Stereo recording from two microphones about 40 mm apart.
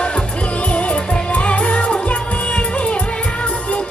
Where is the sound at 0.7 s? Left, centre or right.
Left.